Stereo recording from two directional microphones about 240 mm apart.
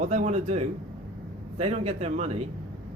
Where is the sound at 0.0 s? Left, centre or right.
Right.